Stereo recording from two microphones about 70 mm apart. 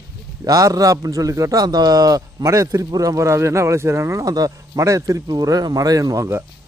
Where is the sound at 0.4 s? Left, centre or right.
Right.